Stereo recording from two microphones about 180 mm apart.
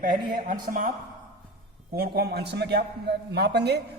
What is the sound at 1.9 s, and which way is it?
A man's voice, 60° right (ahead or behind).